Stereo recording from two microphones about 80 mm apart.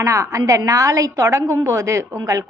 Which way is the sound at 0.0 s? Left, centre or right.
Right.